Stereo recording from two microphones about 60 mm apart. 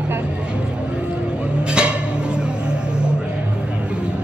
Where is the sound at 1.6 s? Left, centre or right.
Centre.